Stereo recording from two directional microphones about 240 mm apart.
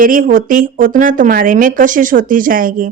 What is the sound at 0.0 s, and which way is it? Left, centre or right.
A woman's voice, right.